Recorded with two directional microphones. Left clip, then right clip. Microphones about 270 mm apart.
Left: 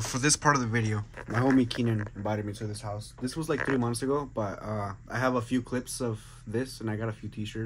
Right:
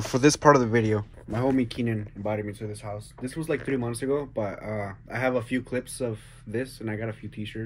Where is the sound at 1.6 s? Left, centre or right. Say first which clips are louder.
Even; centre.